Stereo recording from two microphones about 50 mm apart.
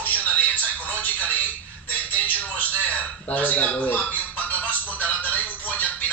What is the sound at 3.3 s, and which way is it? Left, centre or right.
Speech, left.